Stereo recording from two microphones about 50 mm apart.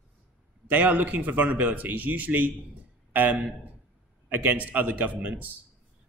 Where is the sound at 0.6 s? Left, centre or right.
Right.